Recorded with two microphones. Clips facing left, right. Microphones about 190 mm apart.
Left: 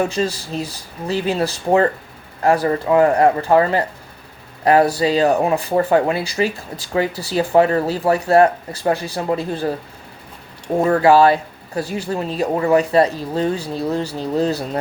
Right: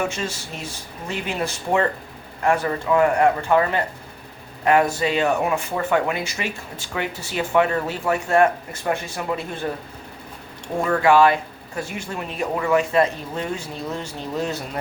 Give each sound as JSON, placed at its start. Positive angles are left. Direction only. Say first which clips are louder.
{"t": 0.0, "sound": "speech", "louder": "left 6 dB", "side_deg": 35}
{"t": 10.8, "sound": "speech", "louder": "left 4 dB", "side_deg": 35}